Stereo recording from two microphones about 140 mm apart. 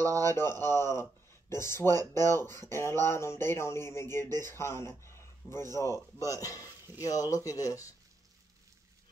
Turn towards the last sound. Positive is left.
turn(degrees=25)  # may be behind; listen again after turning